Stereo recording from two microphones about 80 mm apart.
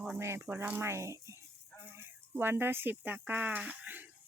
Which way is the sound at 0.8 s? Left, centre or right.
Right.